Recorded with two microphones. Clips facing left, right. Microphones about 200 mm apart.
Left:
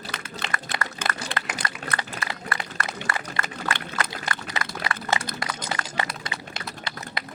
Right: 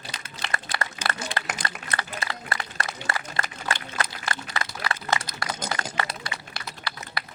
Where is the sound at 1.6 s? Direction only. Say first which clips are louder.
Even; 30° right (ahead or behind).